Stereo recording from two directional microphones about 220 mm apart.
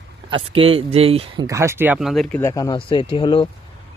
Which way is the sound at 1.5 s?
10° right (ahead or behind).